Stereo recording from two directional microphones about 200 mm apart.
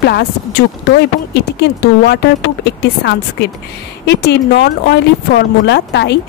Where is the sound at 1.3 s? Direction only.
55° left (ahead or behind).